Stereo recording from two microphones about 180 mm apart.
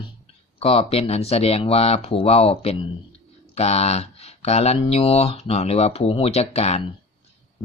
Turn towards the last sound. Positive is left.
turn(degrees=35)  # may be behind; listen again after turning